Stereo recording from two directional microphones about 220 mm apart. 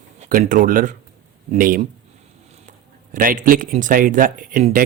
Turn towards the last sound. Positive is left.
turn(degrees=-40)  # may be behind; listen again after turning